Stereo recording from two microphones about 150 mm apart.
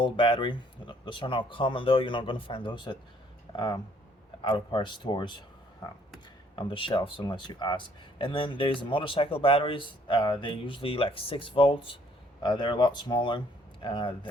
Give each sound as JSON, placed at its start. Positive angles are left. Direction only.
{"t": 0.0, "sound": "speech", "side_deg": 35}
{"t": 6.6, "sound": "speech", "side_deg": 35}